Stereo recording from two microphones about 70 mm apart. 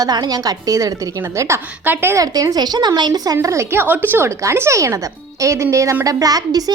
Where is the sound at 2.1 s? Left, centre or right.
Right.